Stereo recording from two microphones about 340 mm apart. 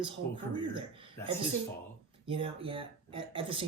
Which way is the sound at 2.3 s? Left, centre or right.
Centre.